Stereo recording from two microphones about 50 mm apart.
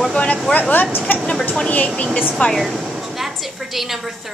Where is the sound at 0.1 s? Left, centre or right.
Left.